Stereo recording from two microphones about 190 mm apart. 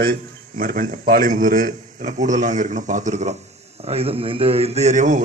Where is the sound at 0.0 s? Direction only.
50° right (ahead or behind).